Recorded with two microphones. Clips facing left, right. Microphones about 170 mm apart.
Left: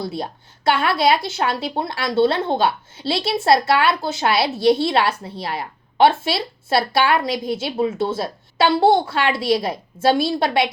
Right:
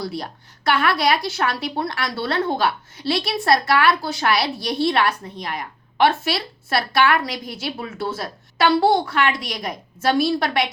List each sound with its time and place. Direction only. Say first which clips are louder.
0.0 s a woman's voice: left 2 dB; 25° left (ahead or behind)